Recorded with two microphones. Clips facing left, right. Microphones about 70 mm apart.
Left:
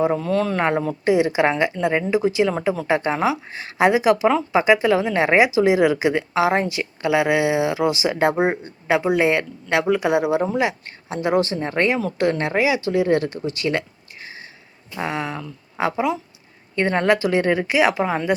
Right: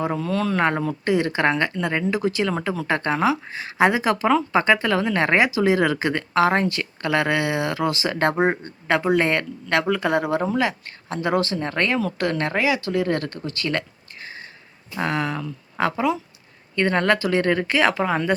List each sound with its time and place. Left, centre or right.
0.2 s speech: left
1.0 s speech: centre
3.3 s speech: centre
14.2 s a sound: centre
14.9 s speech: centre